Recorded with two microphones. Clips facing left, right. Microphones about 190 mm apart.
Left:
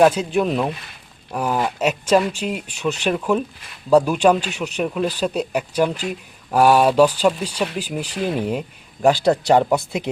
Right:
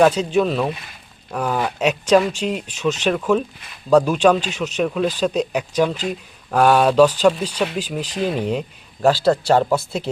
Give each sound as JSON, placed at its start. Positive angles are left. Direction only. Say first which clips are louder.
{"t": 0.0, "sound": "speech", "louder": "even", "side_deg": 10}